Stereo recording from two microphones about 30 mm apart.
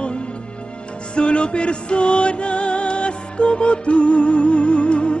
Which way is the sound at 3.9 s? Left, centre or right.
Left.